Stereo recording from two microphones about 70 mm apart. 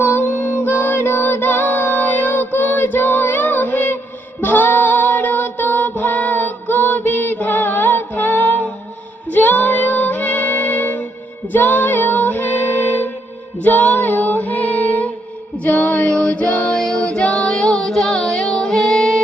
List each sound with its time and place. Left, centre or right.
0.0 s music: left
4.4 s child singing: left
9.3 s music: left
11.5 s child singing: left
13.6 s female singing: left; by 19.2 s centre